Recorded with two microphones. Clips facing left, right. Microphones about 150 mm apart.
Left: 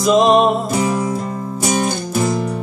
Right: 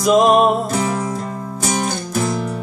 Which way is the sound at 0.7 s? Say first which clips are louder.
Left 2 dB; 10° left (ahead or behind).